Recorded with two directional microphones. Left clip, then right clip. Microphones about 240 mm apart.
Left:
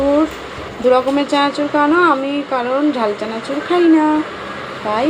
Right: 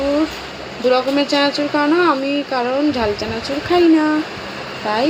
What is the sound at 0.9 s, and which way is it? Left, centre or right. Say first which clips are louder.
Speech: left 1 dB; centre.